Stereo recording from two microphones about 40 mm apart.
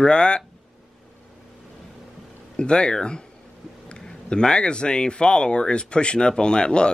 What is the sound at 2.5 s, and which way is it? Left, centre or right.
Speech, left.